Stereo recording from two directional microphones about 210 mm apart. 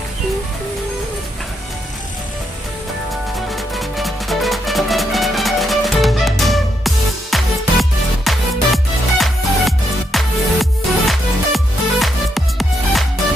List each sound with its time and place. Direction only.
3.5 s music: centre (ahead or behind)